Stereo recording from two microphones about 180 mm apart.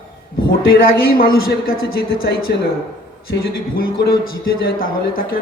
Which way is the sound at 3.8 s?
60° left (ahead or behind).